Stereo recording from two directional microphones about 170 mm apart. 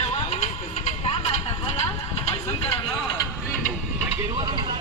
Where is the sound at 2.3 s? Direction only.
35° left (ahead or behind).